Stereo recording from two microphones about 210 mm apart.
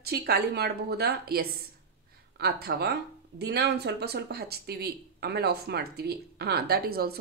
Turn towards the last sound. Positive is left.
turn(degrees=-45)  # may be behind; listen again after turning